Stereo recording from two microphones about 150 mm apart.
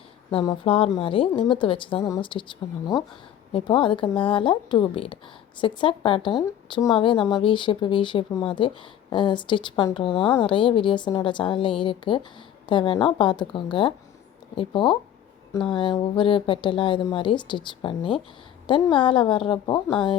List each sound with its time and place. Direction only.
0.6 s speech: 35° left (ahead or behind)
3.5 s a woman's voice: 35° left (ahead or behind)